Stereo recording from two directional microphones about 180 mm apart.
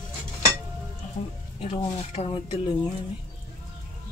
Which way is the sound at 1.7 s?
40° left (ahead or behind).